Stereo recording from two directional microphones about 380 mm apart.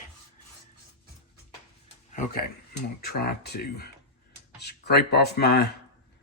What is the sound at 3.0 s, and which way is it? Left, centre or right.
Speech, left.